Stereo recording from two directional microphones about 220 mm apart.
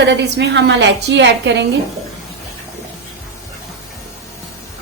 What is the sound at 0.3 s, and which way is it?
Speech, 50° right (ahead or behind).